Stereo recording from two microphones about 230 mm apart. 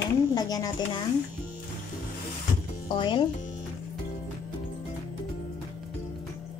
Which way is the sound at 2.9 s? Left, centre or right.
Centre.